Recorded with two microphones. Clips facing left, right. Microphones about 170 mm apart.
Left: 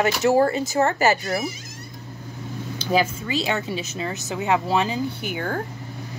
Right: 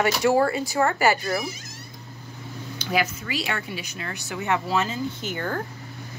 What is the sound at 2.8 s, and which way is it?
Speech, 30° left (ahead or behind).